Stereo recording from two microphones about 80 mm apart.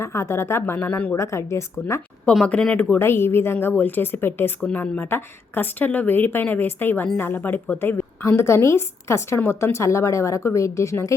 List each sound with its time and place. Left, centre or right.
0.0 s a woman's voice: left
1.1 s a woman's voice: left
2.5 s speech: centre
3.0 s a woman's voice: left